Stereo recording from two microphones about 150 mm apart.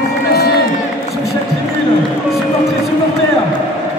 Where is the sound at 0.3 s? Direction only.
90° left.